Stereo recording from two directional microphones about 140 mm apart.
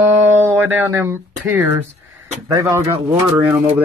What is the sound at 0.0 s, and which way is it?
Speech, 15° right (ahead or behind).